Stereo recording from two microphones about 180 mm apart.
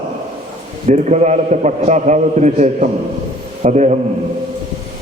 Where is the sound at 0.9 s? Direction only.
40° right (ahead or behind).